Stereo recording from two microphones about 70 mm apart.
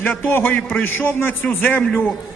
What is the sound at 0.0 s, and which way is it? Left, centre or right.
A man's voice, left.